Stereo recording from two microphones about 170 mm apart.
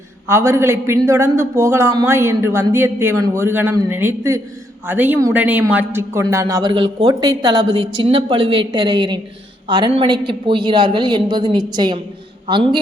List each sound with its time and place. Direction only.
0.3 s a man's voice: 15° right (ahead or behind)